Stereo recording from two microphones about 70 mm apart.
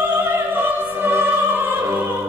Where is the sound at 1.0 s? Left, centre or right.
Right.